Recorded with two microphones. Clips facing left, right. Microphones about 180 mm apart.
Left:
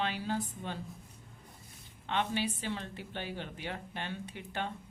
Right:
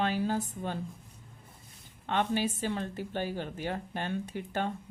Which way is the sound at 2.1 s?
45° right (ahead or behind).